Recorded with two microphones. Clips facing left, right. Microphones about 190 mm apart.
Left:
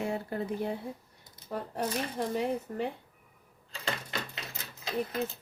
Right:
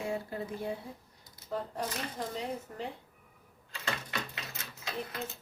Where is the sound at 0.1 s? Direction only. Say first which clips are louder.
Left 3 dB; 60° left (ahead or behind).